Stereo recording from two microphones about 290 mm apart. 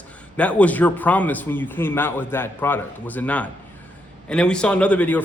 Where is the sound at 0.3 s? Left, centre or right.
Centre.